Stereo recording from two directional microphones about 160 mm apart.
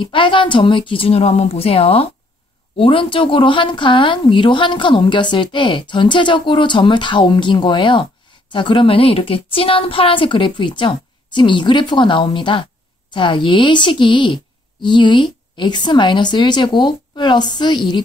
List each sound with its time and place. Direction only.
0.0 s a woman's voice: 30° left (ahead or behind)